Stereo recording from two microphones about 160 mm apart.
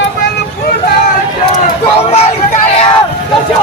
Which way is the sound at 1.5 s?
40° left (ahead or behind).